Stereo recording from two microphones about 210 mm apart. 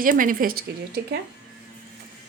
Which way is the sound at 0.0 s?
40° right (ahead or behind).